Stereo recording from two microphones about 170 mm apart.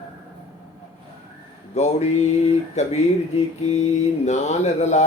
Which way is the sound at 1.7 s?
40° left (ahead or behind).